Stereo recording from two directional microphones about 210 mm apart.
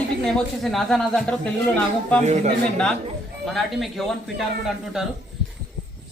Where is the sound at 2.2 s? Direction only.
35° right (ahead or behind).